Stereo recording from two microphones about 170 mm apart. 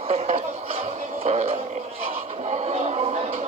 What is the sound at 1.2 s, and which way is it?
Radio, 40° right (ahead or behind).